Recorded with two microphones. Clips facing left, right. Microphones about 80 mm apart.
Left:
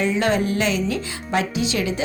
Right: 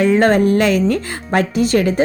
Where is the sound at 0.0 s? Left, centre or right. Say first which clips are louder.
Right 8 dB; right.